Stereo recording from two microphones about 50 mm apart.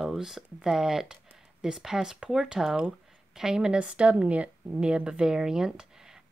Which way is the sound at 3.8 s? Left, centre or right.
Right.